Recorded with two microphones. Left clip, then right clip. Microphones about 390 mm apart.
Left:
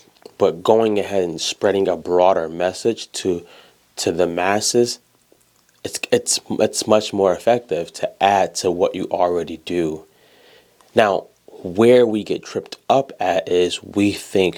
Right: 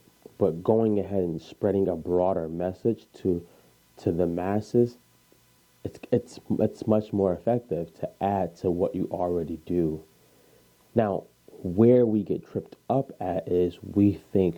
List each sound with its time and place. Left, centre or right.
0.3 s speech: centre
10.9 s speech: centre